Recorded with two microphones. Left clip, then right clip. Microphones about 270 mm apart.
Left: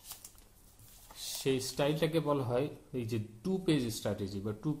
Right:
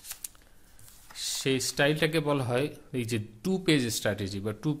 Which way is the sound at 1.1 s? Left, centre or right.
Right.